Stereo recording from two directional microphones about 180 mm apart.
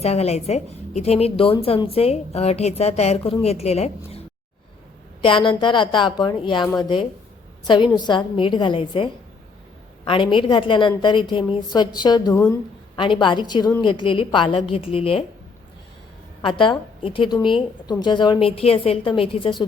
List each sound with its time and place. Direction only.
0.0 s a woman's voice: 35° left (ahead or behind)
5.2 s a woman's voice: 25° left (ahead or behind)
16.4 s a woman's voice: 25° left (ahead or behind)